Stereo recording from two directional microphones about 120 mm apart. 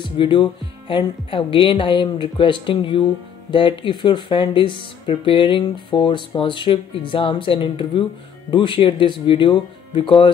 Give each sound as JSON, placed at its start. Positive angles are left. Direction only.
{"t": 0.0, "sound": "speech", "side_deg": 40}